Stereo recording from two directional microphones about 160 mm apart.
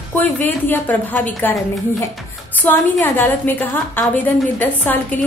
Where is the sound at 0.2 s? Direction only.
10° left (ahead or behind).